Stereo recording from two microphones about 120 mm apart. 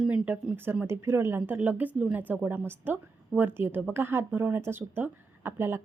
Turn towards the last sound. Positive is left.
turn(degrees=-20)  # may be behind; listen again after turning